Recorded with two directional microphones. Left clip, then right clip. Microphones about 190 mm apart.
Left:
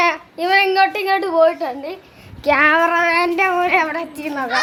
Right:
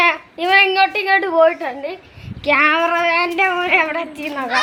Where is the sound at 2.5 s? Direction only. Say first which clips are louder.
Left 1 dB; 20° left (ahead or behind).